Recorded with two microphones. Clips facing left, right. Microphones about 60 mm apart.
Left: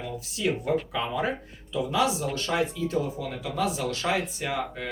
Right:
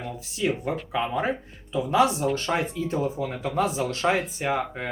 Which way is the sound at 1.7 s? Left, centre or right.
Right.